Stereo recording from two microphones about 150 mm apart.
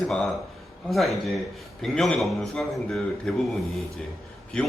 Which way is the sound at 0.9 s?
Centre (ahead or behind).